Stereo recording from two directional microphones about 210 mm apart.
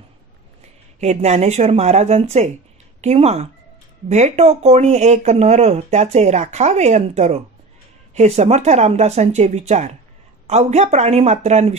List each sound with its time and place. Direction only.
0.9 s speech: 35° right (ahead or behind)